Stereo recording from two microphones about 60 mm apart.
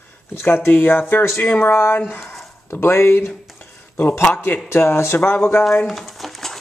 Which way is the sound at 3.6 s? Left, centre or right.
Left.